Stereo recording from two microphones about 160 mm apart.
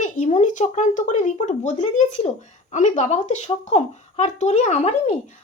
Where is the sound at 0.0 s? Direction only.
50° left (ahead or behind).